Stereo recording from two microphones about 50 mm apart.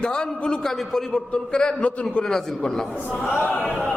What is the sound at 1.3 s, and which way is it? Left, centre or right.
Speech, centre.